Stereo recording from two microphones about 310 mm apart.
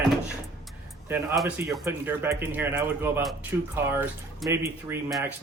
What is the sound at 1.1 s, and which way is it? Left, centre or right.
Speech, centre.